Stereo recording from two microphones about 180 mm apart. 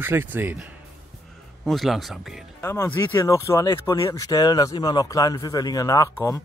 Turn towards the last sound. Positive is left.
turn(degrees=20)  # may be behind; listen again after turning